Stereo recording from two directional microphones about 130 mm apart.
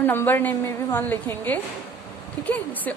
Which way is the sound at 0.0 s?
15° left (ahead or behind).